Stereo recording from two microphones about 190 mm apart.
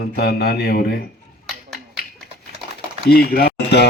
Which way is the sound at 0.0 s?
55° left (ahead or behind).